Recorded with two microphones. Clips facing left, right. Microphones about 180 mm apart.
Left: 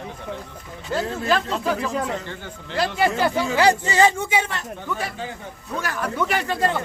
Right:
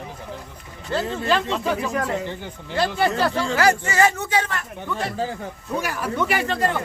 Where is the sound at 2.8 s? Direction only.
5° left (ahead or behind).